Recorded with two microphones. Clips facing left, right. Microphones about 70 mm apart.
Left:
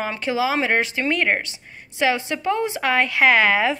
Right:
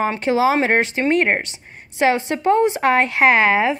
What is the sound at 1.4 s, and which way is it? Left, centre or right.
Speech, right.